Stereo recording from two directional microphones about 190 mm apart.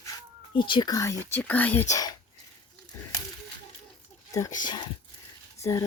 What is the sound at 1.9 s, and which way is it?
Speech, 20° left (ahead or behind).